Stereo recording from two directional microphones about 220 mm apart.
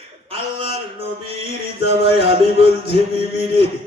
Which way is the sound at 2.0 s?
25° right (ahead or behind).